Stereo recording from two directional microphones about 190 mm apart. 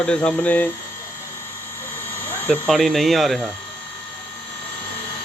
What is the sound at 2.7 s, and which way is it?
Speech, centre (ahead or behind).